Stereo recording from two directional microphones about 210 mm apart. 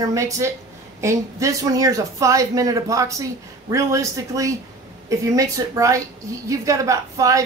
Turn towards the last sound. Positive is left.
turn(degrees=-15)  # may be behind; listen again after turning